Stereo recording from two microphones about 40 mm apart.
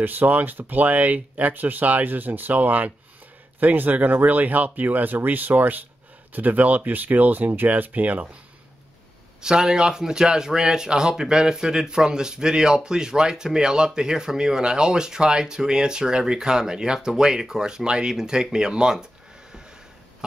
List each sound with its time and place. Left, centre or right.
0.0 s speech: right
9.4 s speech: centre